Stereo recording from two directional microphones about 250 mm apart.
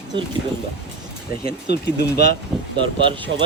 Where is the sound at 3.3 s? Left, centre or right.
Right.